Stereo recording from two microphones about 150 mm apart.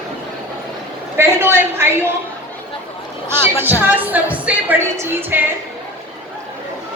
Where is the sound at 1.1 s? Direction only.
15° right (ahead or behind).